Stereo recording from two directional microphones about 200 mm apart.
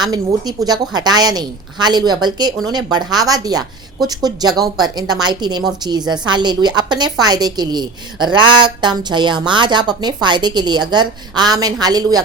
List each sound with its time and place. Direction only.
0.0 s a woman's voice: 20° right (ahead or behind)